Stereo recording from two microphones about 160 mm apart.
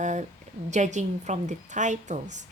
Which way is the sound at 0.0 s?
50° right (ahead or behind).